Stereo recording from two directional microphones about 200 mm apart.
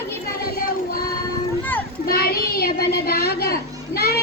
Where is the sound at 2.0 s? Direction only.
50° left (ahead or behind).